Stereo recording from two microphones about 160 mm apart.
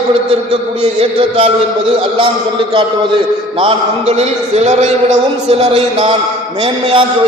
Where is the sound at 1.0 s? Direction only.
35° right (ahead or behind).